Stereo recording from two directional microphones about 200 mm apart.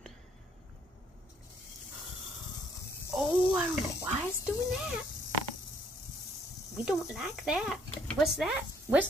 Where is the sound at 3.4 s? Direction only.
5° right (ahead or behind).